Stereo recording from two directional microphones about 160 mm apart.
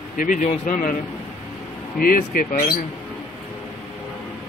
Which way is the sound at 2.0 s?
60° left (ahead or behind).